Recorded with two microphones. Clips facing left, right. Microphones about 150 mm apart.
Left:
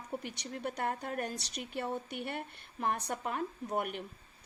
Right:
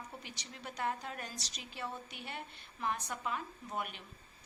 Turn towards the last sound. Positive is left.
turn(degrees=55)  # may be behind; listen again after turning